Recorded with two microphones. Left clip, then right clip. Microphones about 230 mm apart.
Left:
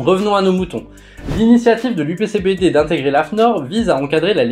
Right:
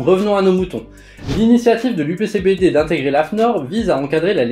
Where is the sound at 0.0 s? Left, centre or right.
Centre.